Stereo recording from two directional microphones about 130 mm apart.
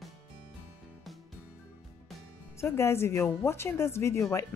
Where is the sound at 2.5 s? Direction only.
20° left (ahead or behind).